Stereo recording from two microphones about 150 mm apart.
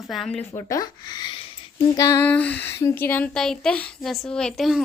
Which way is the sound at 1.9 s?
20° left (ahead or behind).